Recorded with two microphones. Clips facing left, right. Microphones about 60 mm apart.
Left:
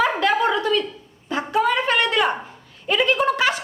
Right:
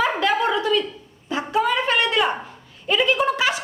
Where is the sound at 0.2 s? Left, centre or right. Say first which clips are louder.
Left 1 dB; left.